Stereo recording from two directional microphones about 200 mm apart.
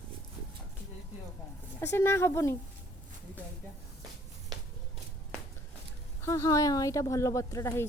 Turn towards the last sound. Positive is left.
turn(degrees=15)  # may be behind; listen again after turning